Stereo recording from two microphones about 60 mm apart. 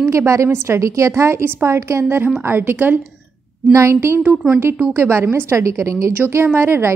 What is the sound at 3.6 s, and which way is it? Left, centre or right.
Speech, right.